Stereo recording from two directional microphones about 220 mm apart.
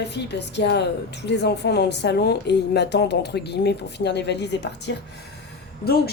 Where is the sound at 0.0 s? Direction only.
50° left (ahead or behind).